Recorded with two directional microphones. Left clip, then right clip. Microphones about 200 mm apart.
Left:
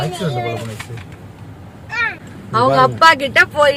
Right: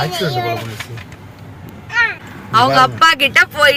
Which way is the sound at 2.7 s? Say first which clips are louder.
Left 3 dB; 15° left (ahead or behind).